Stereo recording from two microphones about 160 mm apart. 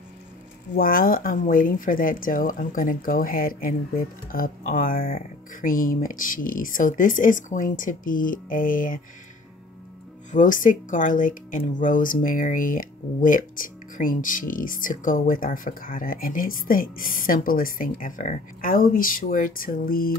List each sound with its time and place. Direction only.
0.7 s a woman's voice: 65° left (ahead or behind)
10.3 s a woman's voice: 55° left (ahead or behind)